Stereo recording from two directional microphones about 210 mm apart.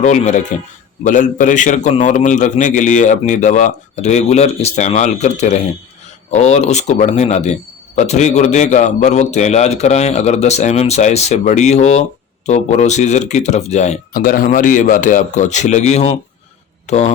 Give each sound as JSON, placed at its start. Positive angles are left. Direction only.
{"t": 0.0, "sound": "a man's voice", "side_deg": 35}